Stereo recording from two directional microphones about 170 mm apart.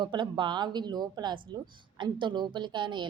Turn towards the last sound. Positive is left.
turn(degrees=-25)  # may be behind; listen again after turning